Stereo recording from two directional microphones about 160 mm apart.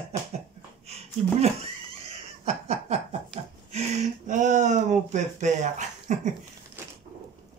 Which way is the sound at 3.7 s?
45° right (ahead or behind).